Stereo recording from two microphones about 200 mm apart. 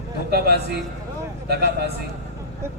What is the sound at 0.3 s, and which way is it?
Speech, 50° right (ahead or behind).